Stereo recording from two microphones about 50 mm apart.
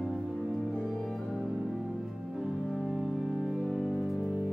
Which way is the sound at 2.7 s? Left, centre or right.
Centre.